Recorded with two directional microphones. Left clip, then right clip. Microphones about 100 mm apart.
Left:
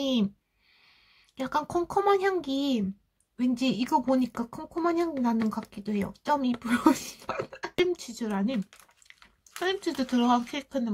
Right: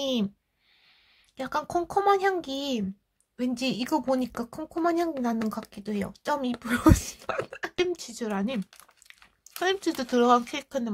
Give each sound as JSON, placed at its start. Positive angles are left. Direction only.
{"t": 0.0, "sound": "a sound", "side_deg": -25}
{"t": 1.3, "sound": "speech", "side_deg": -20}
{"t": 9.6, "sound": "speech", "side_deg": -45}